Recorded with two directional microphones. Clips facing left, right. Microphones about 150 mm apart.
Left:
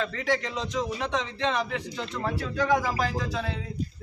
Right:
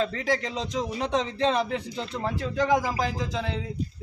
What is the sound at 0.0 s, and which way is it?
A man's voice, 35° right (ahead or behind).